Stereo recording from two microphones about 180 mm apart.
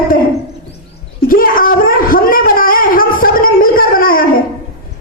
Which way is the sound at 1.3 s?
50° left (ahead or behind).